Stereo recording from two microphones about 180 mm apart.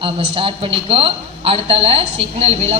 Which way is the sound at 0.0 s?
30° right (ahead or behind).